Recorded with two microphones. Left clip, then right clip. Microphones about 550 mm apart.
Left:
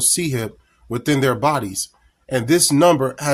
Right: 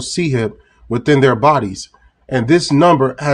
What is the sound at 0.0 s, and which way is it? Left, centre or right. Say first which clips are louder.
Speech: right 4 dB; left.